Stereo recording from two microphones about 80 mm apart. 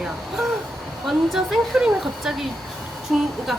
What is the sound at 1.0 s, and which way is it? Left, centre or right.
Speech, centre.